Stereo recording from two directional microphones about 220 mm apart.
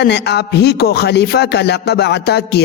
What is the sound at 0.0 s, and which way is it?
A woman's voice, 50° left (ahead or behind).